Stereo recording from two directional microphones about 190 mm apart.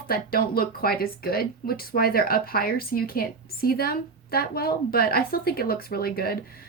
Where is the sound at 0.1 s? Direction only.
50° left (ahead or behind).